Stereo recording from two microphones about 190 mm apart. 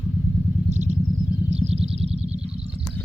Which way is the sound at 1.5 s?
35° right (ahead or behind).